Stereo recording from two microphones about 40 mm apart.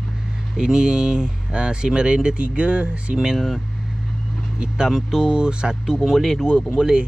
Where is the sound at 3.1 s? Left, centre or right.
Centre.